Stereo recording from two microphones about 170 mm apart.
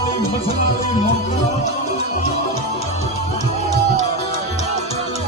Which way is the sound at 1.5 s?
40° left (ahead or behind).